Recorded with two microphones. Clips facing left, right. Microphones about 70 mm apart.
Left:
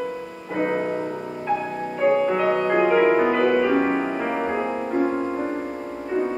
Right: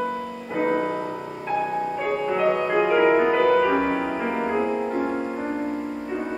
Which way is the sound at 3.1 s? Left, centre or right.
Centre.